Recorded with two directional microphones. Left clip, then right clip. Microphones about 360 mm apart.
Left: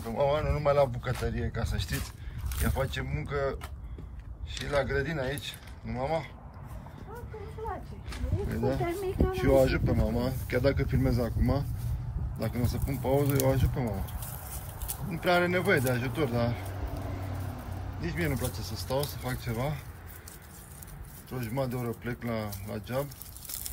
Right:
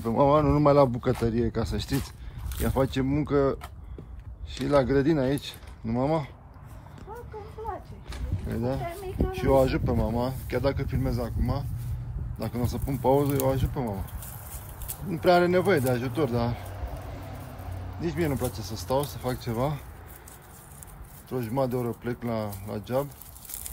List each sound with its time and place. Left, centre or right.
0.2 s speech: centre
8.5 s speech: centre
8.8 s speech: left
9.4 s speech: centre
15.1 s speech: centre
18.0 s speech: centre
21.3 s speech: centre